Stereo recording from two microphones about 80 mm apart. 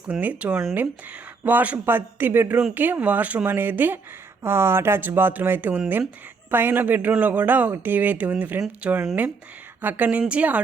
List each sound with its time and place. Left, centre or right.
0.1 s a woman's voice: centre